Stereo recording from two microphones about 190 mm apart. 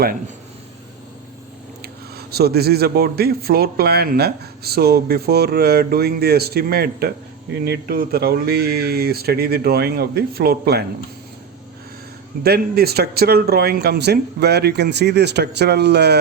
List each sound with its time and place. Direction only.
1.8 s speech: 55° right (ahead or behind)
12.4 s speech: 55° right (ahead or behind)